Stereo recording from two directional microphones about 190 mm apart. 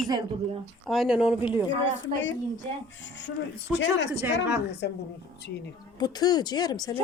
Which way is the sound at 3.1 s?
65° left (ahead or behind).